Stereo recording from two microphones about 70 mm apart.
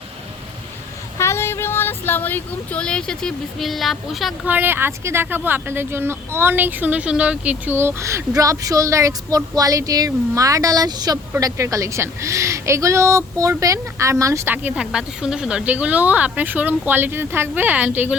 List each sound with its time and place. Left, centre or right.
1.2 s a sound: left
2.7 s speech: centre
4.4 s speech: right
7.7 s speech: right
8.4 s speech: right
14.4 s speech: right
14.7 s speech: centre